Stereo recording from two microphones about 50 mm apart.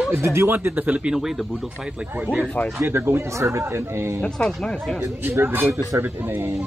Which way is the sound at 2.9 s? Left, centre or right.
Right.